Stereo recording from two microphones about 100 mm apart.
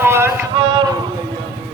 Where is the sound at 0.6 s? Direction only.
45° right (ahead or behind).